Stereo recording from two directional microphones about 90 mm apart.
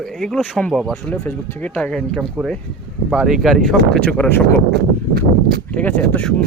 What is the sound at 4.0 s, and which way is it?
Speech, 15° left (ahead or behind).